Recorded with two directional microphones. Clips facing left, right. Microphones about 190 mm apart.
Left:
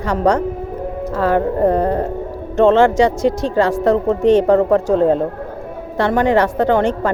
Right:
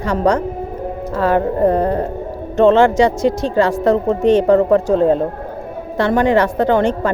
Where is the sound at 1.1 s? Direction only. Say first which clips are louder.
Right 1 dB; 25° right (ahead or behind).